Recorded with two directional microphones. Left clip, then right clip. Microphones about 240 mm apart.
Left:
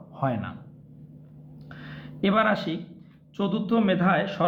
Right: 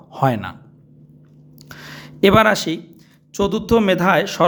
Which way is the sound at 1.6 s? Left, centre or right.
Right.